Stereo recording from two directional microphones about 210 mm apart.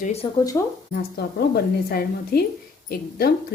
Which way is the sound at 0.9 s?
50° left (ahead or behind).